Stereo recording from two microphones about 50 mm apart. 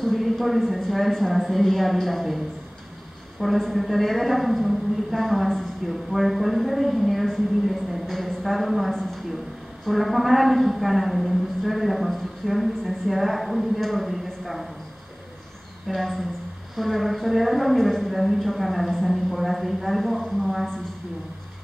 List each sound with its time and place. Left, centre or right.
0.0 s a woman's voice: centre
8.9 s a sound: centre
9.8 s a woman's voice: centre
15.9 s a woman's voice: centre